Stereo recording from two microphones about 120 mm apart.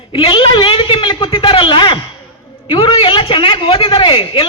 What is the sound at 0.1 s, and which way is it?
A man's voice, 45° left (ahead or behind).